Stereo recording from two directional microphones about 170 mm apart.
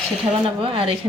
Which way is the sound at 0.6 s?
30° right (ahead or behind).